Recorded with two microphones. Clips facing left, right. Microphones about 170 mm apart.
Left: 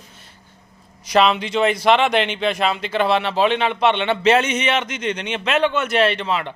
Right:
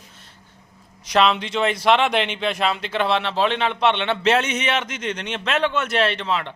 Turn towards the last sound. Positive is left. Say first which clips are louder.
# left 3 dB
turn(degrees=5)  # may be behind; listen again after turning